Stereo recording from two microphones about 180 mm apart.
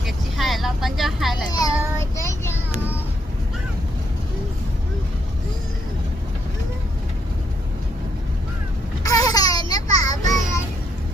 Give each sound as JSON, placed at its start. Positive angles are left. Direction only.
{"t": 0.0, "sound": "vehicle", "side_deg": 0}
{"t": 1.5, "sound": "speech", "side_deg": 20}
{"t": 2.1, "sound": "child singing", "side_deg": 15}
{"t": 9.0, "sound": "a sound", "side_deg": 20}